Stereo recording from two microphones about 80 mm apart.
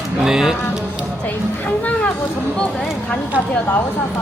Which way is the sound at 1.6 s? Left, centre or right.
Centre.